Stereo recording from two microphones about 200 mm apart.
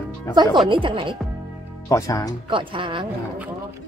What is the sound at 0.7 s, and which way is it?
Speech, 25° right (ahead or behind).